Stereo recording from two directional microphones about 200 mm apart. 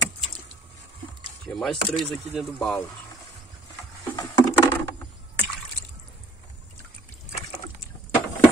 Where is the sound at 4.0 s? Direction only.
20° left (ahead or behind).